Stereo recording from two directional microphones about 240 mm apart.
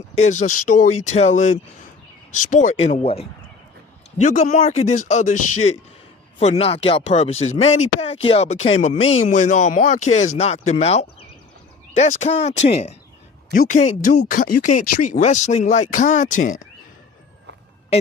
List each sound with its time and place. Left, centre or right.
0.2 s speech: left